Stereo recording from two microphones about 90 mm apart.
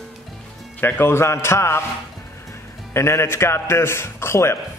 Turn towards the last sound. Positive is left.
turn(degrees=30)  # may be behind; listen again after turning